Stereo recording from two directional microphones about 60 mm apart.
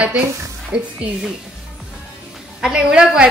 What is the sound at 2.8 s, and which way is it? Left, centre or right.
Speech, centre.